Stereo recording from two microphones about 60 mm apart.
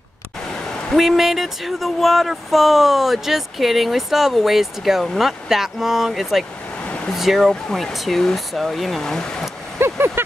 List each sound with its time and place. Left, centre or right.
0.5 s a sound: centre
0.9 s speech: centre
9.8 s vehicle: right